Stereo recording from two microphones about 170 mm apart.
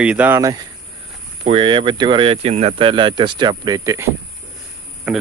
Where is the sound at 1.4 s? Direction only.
30° right (ahead or behind).